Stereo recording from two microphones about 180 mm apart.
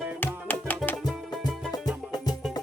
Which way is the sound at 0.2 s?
10° left (ahead or behind).